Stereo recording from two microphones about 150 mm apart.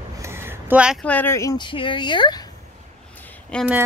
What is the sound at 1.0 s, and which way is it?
Speech, 10° left (ahead or behind).